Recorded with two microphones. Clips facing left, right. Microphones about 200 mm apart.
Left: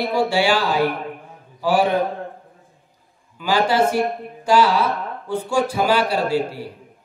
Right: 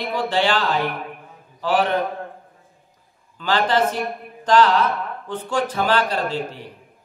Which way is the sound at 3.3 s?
10° left (ahead or behind).